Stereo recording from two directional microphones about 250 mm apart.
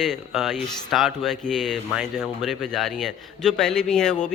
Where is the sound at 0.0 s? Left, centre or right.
Centre.